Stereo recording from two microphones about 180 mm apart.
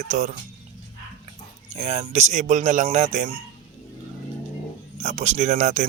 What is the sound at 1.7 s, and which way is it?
Speech, 35° right (ahead or behind).